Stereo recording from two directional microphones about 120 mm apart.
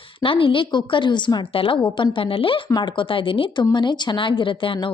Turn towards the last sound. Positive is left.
turn(degrees=45)  # may be behind; listen again after turning